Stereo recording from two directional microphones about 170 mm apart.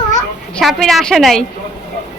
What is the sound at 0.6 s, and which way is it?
Speech, centre (ahead or behind).